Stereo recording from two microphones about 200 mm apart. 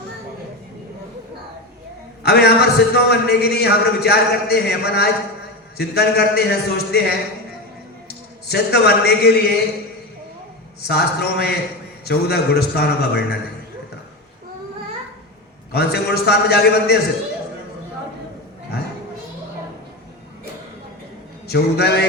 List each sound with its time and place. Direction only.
2.2 s a man's voice: 55° left (ahead or behind)
10.8 s a man's voice: 55° left (ahead or behind)
15.7 s a man's voice: 55° left (ahead or behind)
21.4 s a man's voice: 55° left (ahead or behind)